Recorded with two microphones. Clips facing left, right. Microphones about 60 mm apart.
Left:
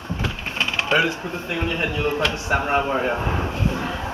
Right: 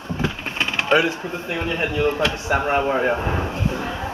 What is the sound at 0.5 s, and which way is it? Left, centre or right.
Sewing machine, right.